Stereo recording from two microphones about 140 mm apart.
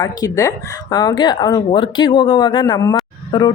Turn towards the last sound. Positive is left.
turn(degrees=30)  # may be behind; listen again after turning